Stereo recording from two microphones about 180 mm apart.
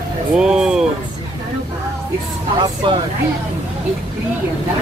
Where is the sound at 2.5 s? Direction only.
25° right (ahead or behind).